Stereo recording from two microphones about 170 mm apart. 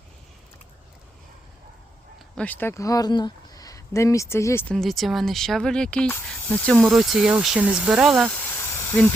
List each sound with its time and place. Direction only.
2.3 s speech: 10° left (ahead or behind)
4.7 s speech: centre (ahead or behind)
8.2 s a sound: 10° left (ahead or behind)